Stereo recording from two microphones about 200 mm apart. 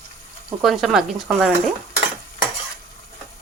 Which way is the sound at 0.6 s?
Centre (ahead or behind).